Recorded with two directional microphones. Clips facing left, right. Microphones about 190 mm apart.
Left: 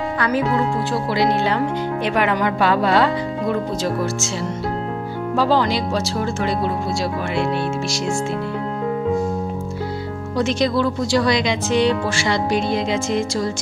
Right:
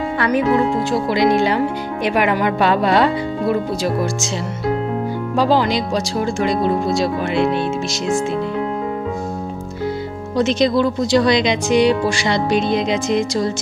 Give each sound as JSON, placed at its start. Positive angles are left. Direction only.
{"t": 0.5, "sound": "speech", "side_deg": -15}
{"t": 5.4, "sound": "speech", "side_deg": -15}
{"t": 10.3, "sound": "speech", "side_deg": -20}